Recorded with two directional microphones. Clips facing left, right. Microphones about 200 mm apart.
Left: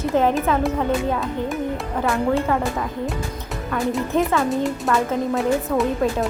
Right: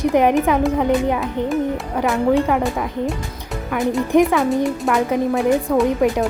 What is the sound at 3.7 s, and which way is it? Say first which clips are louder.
Speech: right 5 dB; 15° right (ahead or behind).